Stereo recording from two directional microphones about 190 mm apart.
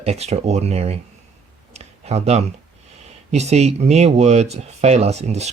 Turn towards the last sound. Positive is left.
turn(degrees=-35)  # may be behind; listen again after turning